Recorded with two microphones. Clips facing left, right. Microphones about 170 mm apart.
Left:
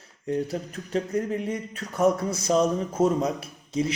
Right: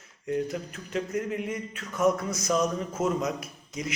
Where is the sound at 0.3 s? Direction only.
30° left (ahead or behind).